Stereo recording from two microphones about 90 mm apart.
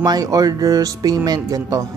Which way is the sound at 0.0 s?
45° right (ahead or behind).